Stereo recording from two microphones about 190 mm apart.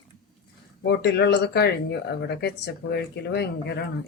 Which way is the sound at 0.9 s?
60° left (ahead or behind).